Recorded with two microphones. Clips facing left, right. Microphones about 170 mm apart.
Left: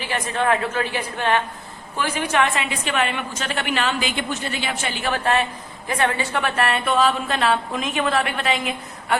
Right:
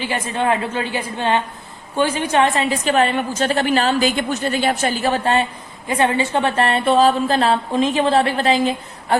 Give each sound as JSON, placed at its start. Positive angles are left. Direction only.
{"t": 0.0, "sound": "a woman's voice", "side_deg": -25}